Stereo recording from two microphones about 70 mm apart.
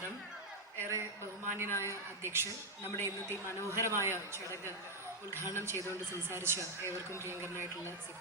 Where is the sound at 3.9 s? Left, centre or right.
Right.